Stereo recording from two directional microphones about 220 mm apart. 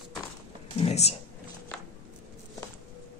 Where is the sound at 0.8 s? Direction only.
30° left (ahead or behind).